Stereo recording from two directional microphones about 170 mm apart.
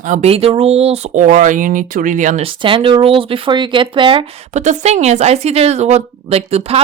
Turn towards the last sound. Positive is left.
turn(degrees=-40)  # may be behind; listen again after turning